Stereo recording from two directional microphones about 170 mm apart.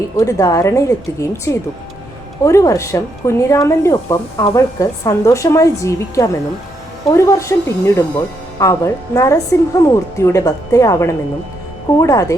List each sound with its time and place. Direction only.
0.2 s a woman's voice: 20° left (ahead or behind)